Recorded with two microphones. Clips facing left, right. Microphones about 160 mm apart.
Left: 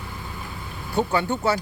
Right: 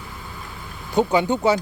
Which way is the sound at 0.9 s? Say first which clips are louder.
Right 4 dB; 15° right (ahead or behind).